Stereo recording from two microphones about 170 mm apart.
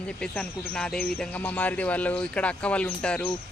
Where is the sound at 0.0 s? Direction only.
5° left (ahead or behind).